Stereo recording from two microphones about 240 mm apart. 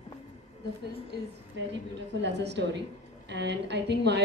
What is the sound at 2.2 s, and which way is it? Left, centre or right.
A woman's voice, right.